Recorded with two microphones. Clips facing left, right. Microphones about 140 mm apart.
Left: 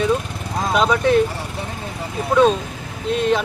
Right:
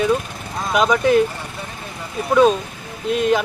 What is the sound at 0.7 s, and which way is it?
Speech, 10° right (ahead or behind).